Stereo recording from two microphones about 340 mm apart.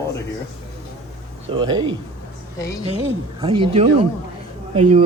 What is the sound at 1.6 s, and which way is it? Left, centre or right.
Speech, centre.